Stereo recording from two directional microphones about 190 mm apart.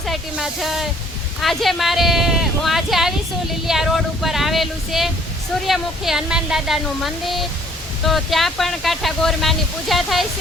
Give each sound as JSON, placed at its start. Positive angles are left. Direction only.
{"t": 0.0, "sound": "speech", "side_deg": 0}